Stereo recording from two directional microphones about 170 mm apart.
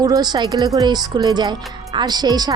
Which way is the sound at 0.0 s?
25° right (ahead or behind).